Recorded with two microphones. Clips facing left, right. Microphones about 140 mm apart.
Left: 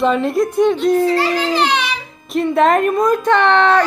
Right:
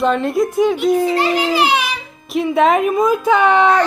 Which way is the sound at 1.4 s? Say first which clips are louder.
Right 1 dB; 5° right (ahead or behind).